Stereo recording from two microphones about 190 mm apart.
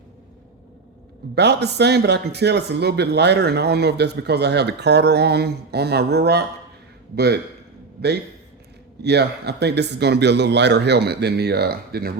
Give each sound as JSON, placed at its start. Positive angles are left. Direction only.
{"t": 1.4, "sound": "speech", "side_deg": -60}
{"t": 9.0, "sound": "speech", "side_deg": -60}